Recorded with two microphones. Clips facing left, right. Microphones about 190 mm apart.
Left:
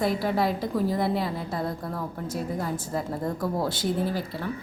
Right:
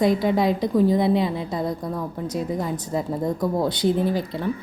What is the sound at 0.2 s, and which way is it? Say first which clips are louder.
A woman's voice: right 5 dB; 20° right (ahead or behind).